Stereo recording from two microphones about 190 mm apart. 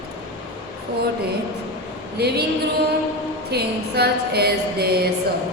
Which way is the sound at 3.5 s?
60° right (ahead or behind).